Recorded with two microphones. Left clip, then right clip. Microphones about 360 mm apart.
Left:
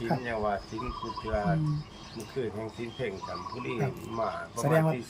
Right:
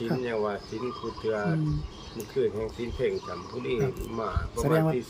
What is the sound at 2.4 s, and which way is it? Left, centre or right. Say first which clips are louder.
Speech: right 7 dB; centre.